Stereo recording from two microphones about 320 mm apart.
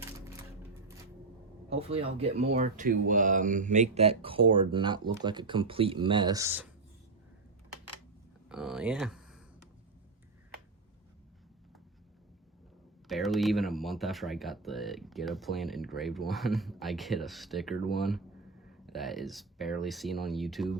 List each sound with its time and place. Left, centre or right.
1.7 s speech: centre
8.4 s speech: centre
13.1 s speech: centre